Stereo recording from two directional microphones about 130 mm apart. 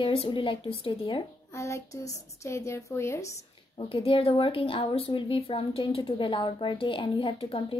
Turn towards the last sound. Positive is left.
turn(degrees=45)  # may be behind; listen again after turning